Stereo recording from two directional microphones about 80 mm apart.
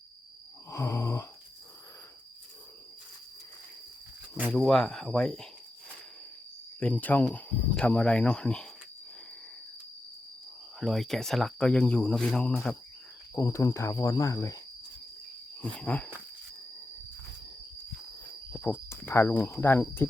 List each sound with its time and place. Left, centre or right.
0.7 s snoring: left
4.5 s speech: centre
6.7 s speech: centre
10.8 s speech: centre
13.3 s cricket: left
15.6 s speech: centre
18.6 s cricket: left
19.5 s speech: left